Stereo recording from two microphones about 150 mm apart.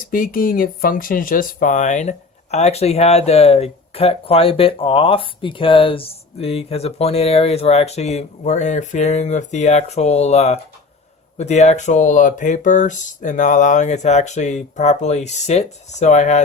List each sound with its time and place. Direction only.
0.0 s speech: 65° left (ahead or behind); by 16.4 s 50° left (ahead or behind)